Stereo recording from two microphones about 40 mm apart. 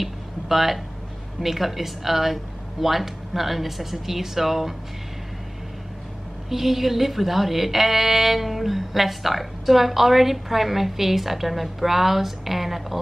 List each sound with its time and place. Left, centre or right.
0.0 s a sound: centre
1.4 s a woman's voice: centre
6.5 s a woman's voice: centre